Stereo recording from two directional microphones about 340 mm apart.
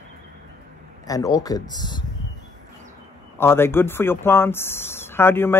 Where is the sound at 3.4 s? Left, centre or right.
Centre.